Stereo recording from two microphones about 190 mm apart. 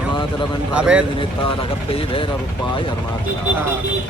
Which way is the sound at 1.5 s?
30° left (ahead or behind).